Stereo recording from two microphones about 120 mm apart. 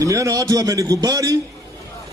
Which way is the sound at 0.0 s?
25° right (ahead or behind).